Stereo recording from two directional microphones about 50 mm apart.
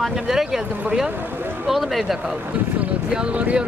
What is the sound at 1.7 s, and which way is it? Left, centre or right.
Speech, centre.